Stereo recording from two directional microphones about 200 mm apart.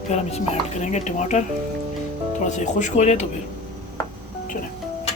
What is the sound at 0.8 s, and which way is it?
Speech, 35° left (ahead or behind).